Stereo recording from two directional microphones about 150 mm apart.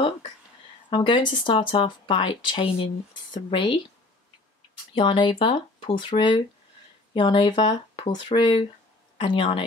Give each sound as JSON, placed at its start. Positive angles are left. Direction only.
{"t": 0.8, "sound": "speech", "side_deg": 35}
{"t": 4.9, "sound": "speech", "side_deg": 35}